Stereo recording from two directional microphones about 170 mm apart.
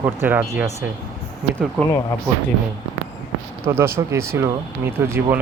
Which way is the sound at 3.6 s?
15° right (ahead or behind).